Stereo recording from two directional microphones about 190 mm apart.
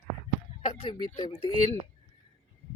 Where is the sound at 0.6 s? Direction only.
30° left (ahead or behind).